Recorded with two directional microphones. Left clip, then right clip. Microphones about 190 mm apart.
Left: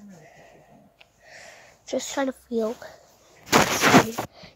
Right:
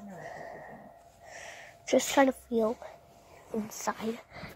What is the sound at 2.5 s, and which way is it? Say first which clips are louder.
Speech: left 5 dB; 15° left (ahead or behind).